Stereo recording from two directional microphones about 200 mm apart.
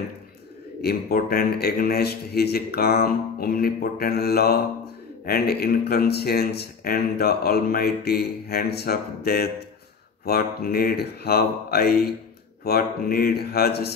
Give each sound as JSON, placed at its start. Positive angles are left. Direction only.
{"t": 0.8, "sound": "speech", "side_deg": 45}